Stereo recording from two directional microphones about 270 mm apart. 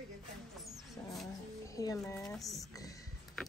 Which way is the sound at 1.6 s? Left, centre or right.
Centre.